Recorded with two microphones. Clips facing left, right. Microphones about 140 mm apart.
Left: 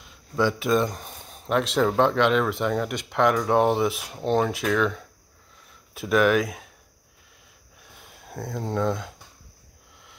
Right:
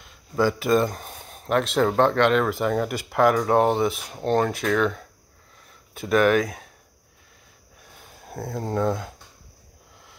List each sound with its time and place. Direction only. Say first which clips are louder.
0.0 s speech: right 2 dB; centre (ahead or behind)
8.3 s speech: right 1 dB; 5° right (ahead or behind)